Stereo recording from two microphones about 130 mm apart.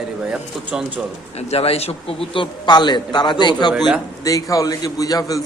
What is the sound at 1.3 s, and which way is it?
A man's voice, 50° left (ahead or behind).